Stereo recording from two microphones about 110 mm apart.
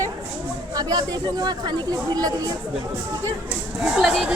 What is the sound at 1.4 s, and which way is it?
Speech, 40° right (ahead or behind).